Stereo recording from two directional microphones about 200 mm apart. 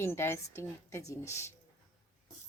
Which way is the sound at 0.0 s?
10° left (ahead or behind).